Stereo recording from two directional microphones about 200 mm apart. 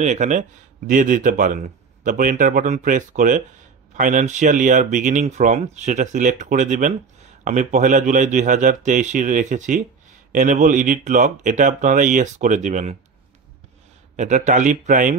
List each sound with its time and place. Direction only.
0.0 s speech: 35° right (ahead or behind)
14.1 s speech: 35° right (ahead or behind)